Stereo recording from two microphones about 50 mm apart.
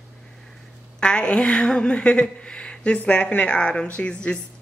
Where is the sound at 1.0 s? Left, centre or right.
Centre.